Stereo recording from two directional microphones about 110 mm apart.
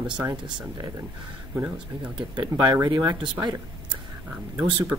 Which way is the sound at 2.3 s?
40° right (ahead or behind).